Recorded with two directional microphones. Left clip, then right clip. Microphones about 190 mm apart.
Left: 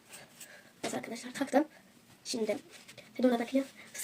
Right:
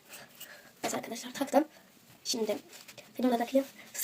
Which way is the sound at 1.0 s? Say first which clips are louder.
Right 1 dB; 20° left (ahead or behind).